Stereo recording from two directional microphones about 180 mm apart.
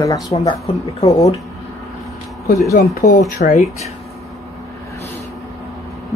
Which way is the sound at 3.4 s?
40° left (ahead or behind).